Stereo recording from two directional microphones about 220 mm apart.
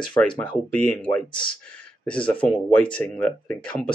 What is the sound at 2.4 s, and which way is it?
Speech, 5° left (ahead or behind).